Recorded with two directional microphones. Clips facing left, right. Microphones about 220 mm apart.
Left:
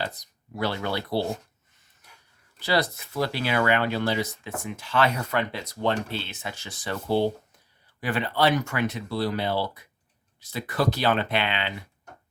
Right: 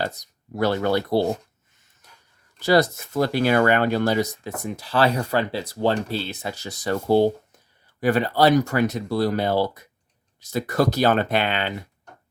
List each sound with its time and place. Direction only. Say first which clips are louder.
0.0 s speech: right 5 dB; 45° right (ahead or behind)
2.6 s speech: right 7 dB; 45° right (ahead or behind)